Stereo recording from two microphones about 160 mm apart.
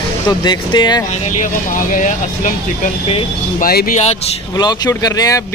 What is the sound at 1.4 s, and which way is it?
Speech, 50° left (ahead or behind).